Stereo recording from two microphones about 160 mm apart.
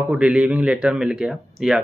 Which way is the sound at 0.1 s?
5° right (ahead or behind).